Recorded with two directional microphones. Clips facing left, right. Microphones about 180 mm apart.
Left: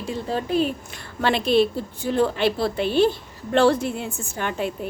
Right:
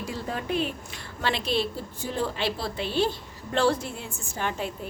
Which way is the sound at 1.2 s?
55° left (ahead or behind).